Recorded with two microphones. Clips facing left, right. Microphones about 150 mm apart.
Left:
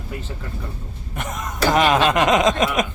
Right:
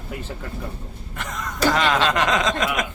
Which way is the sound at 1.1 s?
20° left (ahead or behind).